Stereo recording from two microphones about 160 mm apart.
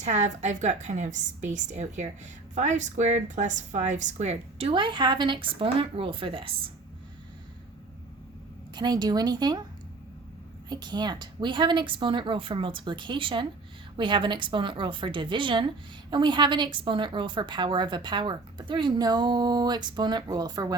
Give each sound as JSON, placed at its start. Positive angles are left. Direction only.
{"t": 0.0, "sound": "a woman's voice", "side_deg": -50}
{"t": 8.7, "sound": "a woman's voice", "side_deg": -25}
{"t": 10.7, "sound": "a woman's voice", "side_deg": -25}